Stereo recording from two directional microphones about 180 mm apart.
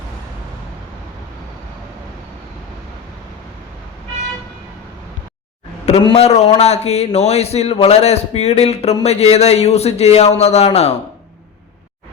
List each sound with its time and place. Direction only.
6.1 s a man's voice: 35° left (ahead or behind)